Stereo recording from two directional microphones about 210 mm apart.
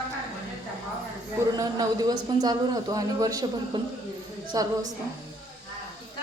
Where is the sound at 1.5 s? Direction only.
15° right (ahead or behind).